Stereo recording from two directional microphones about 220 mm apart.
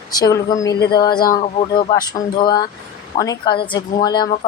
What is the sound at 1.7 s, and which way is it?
A woman's voice, 20° left (ahead or behind).